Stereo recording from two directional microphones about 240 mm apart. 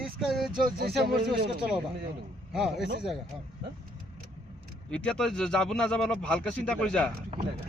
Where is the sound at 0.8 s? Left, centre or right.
Right.